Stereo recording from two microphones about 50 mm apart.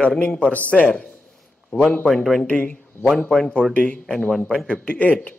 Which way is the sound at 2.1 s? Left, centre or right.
Centre.